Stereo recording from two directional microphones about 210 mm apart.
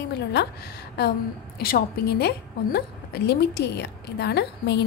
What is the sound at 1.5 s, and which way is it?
A woman's voice, 45° left (ahead or behind).